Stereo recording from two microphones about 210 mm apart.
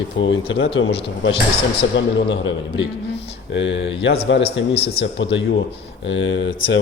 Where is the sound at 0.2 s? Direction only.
60° left (ahead or behind).